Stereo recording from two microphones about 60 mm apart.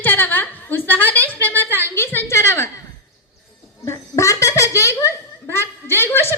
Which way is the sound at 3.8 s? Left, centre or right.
Left.